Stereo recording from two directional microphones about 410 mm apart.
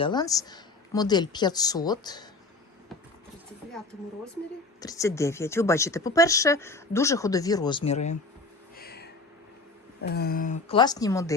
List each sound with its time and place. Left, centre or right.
0.0 s speech: centre
4.8 s speech: centre
8.7 s a sound: left
10.0 s speech: left; by 11.3 s centre